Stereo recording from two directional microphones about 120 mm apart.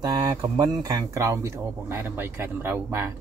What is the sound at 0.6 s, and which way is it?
Speech, 30° right (ahead or behind).